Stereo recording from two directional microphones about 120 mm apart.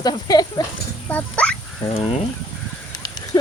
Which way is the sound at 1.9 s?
70° left (ahead or behind).